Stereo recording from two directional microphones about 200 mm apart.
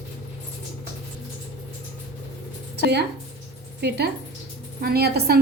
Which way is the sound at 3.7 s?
55° right (ahead or behind).